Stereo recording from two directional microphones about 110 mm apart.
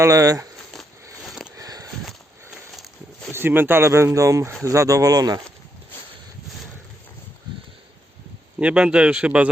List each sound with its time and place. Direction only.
0.0 s speech: 30° right (ahead or behind)
1.2 s sniff: centre (ahead or behind)
1.5 s sniff: 35° right (ahead or behind)
3.3 s speech: 20° right (ahead or behind); by 5.4 s 35° right (ahead or behind)
8.5 s speech: 10° right (ahead or behind)